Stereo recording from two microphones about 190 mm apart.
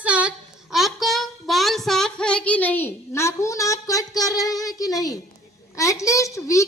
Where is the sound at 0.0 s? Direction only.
5° right (ahead or behind).